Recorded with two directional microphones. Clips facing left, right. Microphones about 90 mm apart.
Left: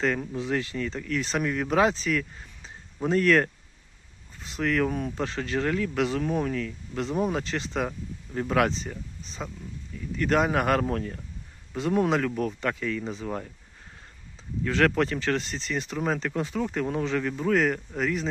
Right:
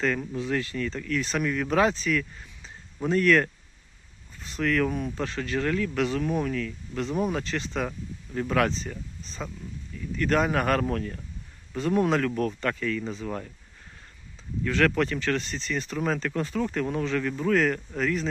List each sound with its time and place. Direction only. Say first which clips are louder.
0.0 s speech: even; 25° left (ahead or behind)
4.9 s speech: even; 35° left (ahead or behind)
14.6 s speech: left 1 dB; 30° left (ahead or behind)